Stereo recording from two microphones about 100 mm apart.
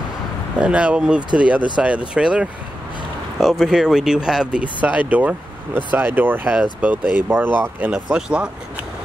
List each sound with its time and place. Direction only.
0.6 s speech: 15° right (ahead or behind)
7.9 s speech: 10° right (ahead or behind)